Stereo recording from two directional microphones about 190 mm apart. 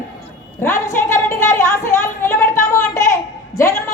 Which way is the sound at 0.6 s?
15° left (ahead or behind).